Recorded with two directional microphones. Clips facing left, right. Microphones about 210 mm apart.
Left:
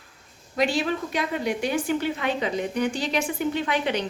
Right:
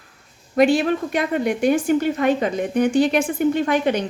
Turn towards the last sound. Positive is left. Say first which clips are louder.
# right 6 dB
turn(degrees=-45)  # may be behind; listen again after turning